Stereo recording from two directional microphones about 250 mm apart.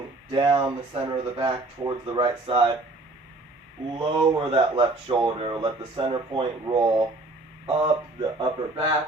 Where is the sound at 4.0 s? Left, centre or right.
Centre.